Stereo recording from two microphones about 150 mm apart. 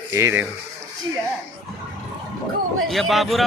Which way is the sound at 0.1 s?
15° right (ahead or behind).